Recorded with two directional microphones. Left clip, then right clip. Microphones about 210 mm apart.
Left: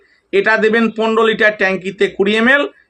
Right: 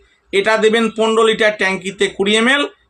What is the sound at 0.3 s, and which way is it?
Speech, 20° right (ahead or behind).